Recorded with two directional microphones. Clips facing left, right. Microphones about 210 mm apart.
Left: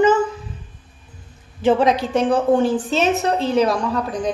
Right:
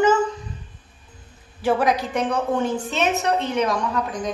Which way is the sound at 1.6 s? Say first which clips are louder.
Left 4 dB; 25° left (ahead or behind).